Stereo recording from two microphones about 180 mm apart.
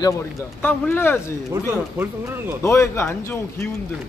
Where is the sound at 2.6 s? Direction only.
15° left (ahead or behind).